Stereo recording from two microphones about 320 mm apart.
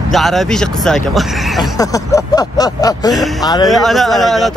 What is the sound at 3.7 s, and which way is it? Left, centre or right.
Speech, centre.